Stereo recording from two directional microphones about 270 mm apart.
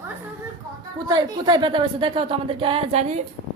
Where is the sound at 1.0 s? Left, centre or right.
Centre.